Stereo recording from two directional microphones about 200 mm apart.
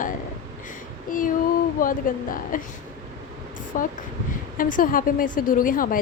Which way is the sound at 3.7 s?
40° left (ahead or behind).